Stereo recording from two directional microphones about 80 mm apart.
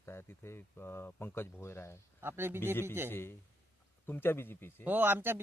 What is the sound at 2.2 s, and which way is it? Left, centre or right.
Speech, right.